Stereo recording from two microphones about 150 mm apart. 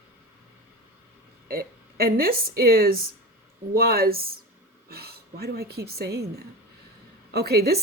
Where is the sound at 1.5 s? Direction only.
85° right.